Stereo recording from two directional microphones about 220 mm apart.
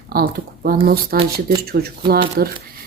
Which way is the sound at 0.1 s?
45° right (ahead or behind).